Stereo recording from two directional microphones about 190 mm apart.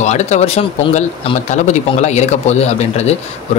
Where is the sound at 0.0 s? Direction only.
35° left (ahead or behind).